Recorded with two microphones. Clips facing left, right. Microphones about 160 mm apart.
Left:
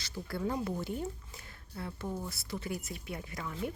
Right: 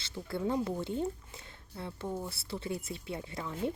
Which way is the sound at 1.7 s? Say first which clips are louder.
Right 1 dB; 20° right (ahead or behind).